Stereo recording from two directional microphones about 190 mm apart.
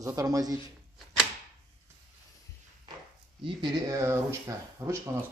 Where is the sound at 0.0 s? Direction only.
15° right (ahead or behind).